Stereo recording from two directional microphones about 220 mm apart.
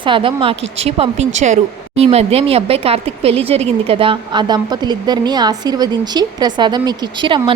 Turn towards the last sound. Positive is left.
turn(degrees=-20)  # may be behind; listen again after turning